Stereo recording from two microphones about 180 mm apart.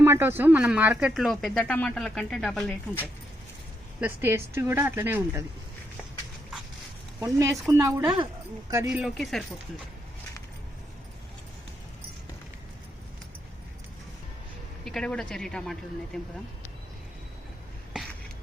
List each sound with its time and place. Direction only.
0.0 s speech: 10° right (ahead or behind); by 3.1 s 10° left (ahead or behind)
4.0 s speech: 10° right (ahead or behind)
7.2 s speech: 15° right (ahead or behind)
8.9 s speech: 5° right (ahead or behind)
14.8 s speech: 5° left (ahead or behind)
18.0 s a sound: centre (ahead or behind)